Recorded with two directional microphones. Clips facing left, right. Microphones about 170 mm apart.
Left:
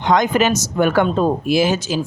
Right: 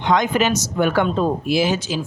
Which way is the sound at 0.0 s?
45° left (ahead or behind).